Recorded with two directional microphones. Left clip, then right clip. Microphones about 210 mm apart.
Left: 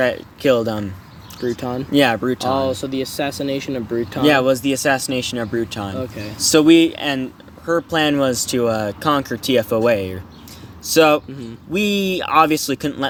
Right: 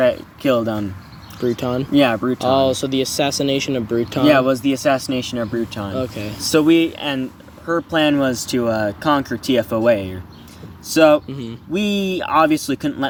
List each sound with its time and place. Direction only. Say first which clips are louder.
0.0 s speech: right 1 dB; 40° left (ahead or behind)
1.5 s speech: right 3 dB; 25° right (ahead or behind)
1.9 s speech: left 1 dB; 40° left (ahead or behind)
2.5 s speech: right 6 dB; 30° right (ahead or behind)
4.3 s speech: even; 40° left (ahead or behind)
6.0 s speech: right 3 dB; 40° right (ahead or behind)
6.4 s speech: left 3 dB; 40° left (ahead or behind)